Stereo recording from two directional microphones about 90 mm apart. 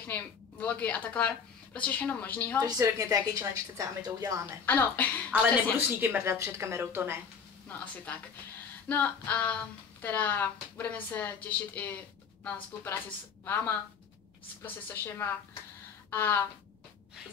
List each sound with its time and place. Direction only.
0.0 s speech: 15° left (ahead or behind)
2.6 s a woman's voice: 40° right (ahead or behind)
4.6 s a woman's voice: 20° left (ahead or behind)
5.3 s a woman's voice: 20° right (ahead or behind)
6.3 s a woman's voice: 35° right (ahead or behind)
7.6 s speech: 15° left (ahead or behind)
8.8 s a sound: 15° left (ahead or behind)
9.3 s speech: 15° left (ahead or behind)
14.6 s a woman's voice: 25° left (ahead or behind)